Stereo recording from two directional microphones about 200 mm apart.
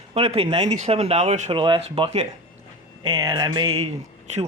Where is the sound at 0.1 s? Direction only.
30° right (ahead or behind).